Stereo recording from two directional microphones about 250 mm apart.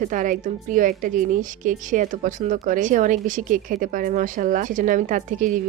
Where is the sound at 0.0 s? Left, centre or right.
Right.